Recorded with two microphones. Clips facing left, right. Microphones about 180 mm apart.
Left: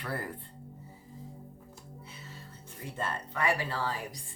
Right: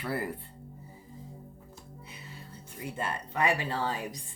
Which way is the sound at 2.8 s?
10° right (ahead or behind).